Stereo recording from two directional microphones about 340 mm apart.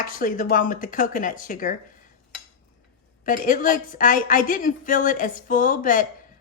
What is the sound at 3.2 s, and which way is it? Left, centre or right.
A woman's voice, left.